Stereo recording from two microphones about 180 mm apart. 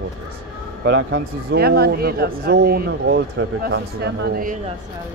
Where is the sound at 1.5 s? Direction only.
60° right (ahead or behind).